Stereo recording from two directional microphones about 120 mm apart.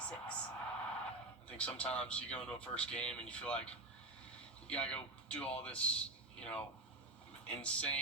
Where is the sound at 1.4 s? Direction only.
10° left (ahead or behind).